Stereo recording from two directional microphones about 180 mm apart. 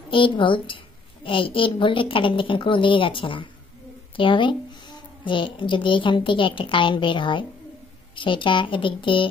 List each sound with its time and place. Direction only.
0.1 s a woman's voice: 30° left (ahead or behind)